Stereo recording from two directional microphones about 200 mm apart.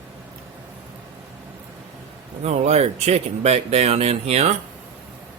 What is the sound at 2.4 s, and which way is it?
Speech, 30° right (ahead or behind).